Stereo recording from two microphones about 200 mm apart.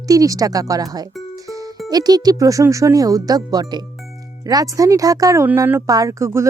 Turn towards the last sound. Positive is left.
turn(degrees=-15)  # may be behind; listen again after turning